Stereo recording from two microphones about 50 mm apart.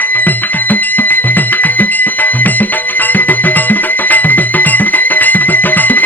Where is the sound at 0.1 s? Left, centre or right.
Left.